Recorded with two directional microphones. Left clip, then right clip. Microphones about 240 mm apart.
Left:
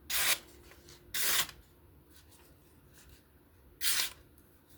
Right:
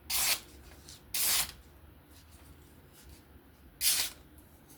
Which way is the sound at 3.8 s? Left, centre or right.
Centre.